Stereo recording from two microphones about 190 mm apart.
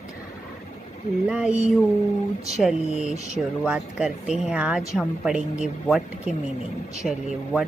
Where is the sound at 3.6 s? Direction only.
5° right (ahead or behind).